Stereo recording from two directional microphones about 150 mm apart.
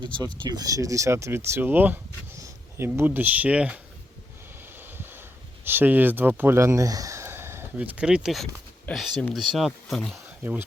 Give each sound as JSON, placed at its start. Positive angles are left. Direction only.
{"t": 0.0, "sound": "speech", "side_deg": -30}
{"t": 4.6, "sound": "a sound", "side_deg": -15}
{"t": 5.6, "sound": "speech", "side_deg": -15}